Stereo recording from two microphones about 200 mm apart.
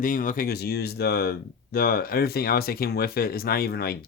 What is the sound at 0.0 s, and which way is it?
Speech, 40° left (ahead or behind).